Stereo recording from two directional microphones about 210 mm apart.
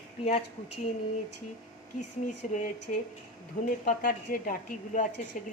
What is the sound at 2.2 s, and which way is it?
A woman's voice, 35° left (ahead or behind).